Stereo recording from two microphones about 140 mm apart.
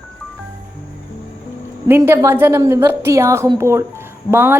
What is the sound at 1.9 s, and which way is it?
A woman's voice, 15° right (ahead or behind).